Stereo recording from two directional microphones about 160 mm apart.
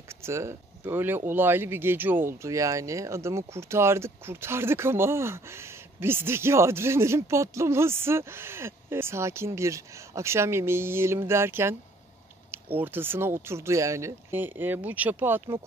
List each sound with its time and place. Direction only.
0.2 s speech: 15° right (ahead or behind)